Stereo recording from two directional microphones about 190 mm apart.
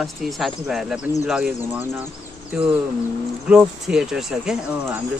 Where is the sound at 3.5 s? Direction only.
5° right (ahead or behind).